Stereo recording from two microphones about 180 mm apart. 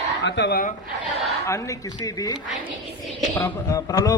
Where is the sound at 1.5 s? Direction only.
15° left (ahead or behind).